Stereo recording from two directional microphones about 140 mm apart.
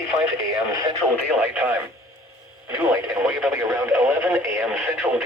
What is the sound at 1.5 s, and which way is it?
Speech, 15° right (ahead or behind).